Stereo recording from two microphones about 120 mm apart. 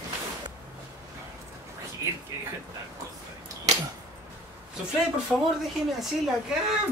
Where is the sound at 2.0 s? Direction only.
25° right (ahead or behind).